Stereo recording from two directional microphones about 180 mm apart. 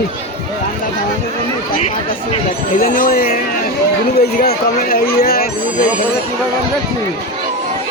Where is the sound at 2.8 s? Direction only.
55° left (ahead or behind).